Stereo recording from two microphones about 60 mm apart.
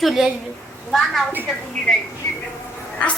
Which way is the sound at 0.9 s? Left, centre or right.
Centre.